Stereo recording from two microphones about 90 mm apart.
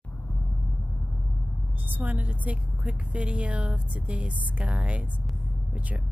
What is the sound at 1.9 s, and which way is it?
A woman's voice, 20° right (ahead or behind).